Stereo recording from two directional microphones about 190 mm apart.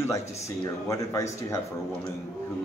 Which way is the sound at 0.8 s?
15° left (ahead or behind).